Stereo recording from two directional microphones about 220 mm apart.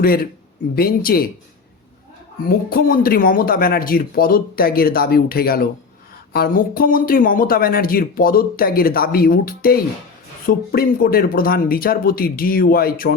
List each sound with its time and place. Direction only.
0.0 s speech: 40° left (ahead or behind)
2.6 s speech: 40° left (ahead or behind)